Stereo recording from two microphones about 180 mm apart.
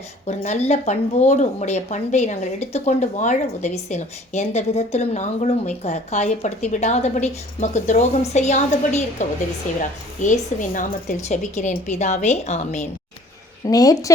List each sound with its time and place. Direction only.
0.3 s speech: 35° left (ahead or behind)
13.7 s a woman's voice: 20° left (ahead or behind)